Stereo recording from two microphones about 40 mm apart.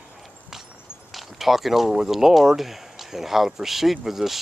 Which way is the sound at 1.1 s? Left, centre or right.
Centre.